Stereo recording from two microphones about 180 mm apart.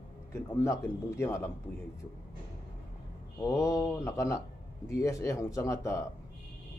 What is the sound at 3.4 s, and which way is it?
Speech, 20° left (ahead or behind).